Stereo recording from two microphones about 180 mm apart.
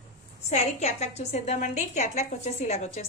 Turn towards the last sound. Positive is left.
turn(degrees=35)  # may be behind; listen again after turning